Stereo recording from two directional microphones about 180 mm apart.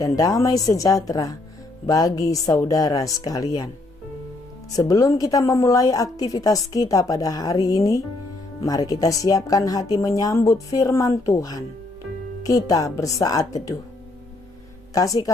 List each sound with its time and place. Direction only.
0.0 s a woman's voice: 20° left (ahead or behind)
4.7 s a woman's voice: 20° left (ahead or behind)
14.9 s a woman's voice: 20° left (ahead or behind)